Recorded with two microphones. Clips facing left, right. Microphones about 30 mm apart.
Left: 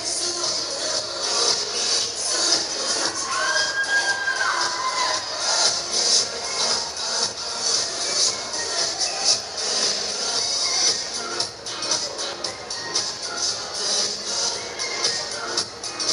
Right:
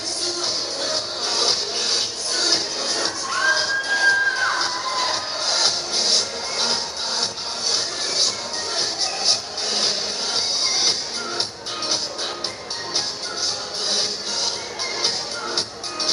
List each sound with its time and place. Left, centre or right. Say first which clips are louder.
0.4 s music: right 1 dB; right
13.8 s music: right 2 dB; right